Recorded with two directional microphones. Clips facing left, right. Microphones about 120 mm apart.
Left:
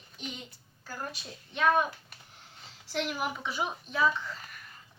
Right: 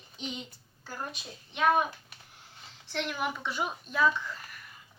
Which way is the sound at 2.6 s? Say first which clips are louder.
Left 2 dB; 5° left (ahead or behind).